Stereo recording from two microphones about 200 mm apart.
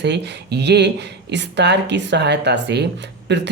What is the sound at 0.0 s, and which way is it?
Speech, 60° right (ahead or behind).